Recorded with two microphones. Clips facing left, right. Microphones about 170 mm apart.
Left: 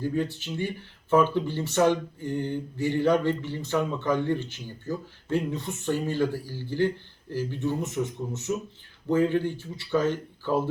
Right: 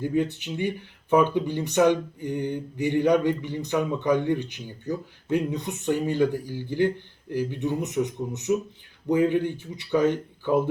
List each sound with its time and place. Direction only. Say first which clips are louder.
0.0 s speech: right 3 dB; 20° right (ahead or behind)